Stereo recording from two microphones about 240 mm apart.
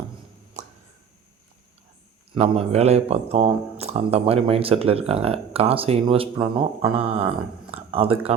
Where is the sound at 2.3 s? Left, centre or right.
Right.